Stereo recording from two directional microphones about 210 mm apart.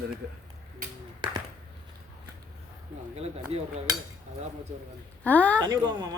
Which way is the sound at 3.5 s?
30° right (ahead or behind).